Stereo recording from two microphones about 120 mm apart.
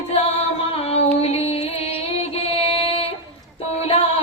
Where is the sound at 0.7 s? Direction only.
60° left (ahead or behind).